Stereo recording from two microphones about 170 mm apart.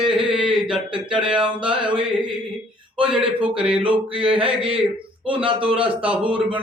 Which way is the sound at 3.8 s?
30° right (ahead or behind).